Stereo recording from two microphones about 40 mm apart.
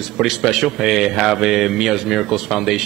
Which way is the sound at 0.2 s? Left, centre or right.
Centre.